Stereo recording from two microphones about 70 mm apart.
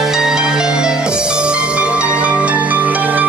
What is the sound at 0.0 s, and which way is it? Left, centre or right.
Music, centre.